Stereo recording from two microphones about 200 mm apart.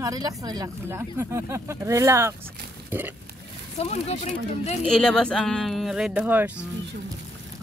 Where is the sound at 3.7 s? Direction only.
30° left (ahead or behind).